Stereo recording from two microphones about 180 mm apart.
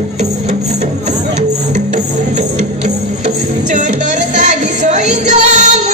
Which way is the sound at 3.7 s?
45° right (ahead or behind).